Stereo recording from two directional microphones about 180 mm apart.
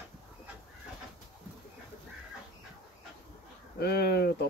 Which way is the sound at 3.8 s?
65° left (ahead or behind).